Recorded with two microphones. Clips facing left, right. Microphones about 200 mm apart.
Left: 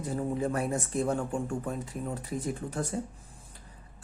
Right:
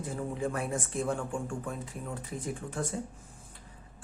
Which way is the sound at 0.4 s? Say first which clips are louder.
Left 3 dB; 40° left (ahead or behind).